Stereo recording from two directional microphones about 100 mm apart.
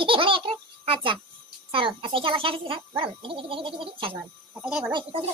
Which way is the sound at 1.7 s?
60° right (ahead or behind).